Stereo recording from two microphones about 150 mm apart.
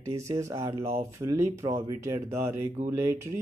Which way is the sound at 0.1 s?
20° right (ahead or behind).